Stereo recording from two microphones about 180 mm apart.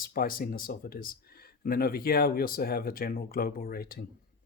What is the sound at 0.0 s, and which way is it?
Speech, 55° left (ahead or behind).